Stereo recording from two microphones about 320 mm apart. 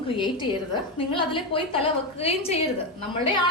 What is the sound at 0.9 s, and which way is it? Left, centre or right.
A woman's voice, centre.